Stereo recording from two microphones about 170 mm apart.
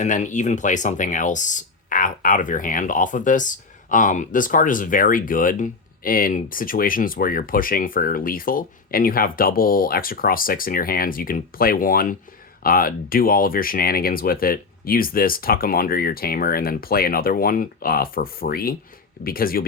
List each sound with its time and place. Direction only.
0.0 s speech: 45° left (ahead or behind)